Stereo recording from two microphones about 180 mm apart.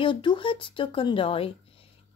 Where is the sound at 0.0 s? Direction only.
25° left (ahead or behind).